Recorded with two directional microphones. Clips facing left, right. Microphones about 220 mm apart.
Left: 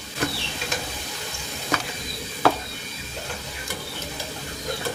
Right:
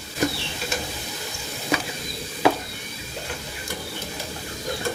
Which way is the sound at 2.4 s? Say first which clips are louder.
Right 1 dB; 15° right (ahead or behind).